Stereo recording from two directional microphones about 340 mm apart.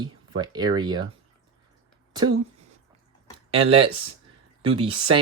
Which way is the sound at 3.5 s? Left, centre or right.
Centre.